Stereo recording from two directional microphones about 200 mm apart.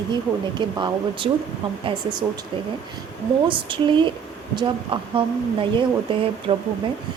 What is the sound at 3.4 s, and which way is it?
Speech, 25° right (ahead or behind).